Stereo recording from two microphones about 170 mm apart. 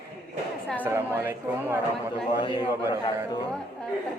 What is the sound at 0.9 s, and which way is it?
Speech, 15° right (ahead or behind).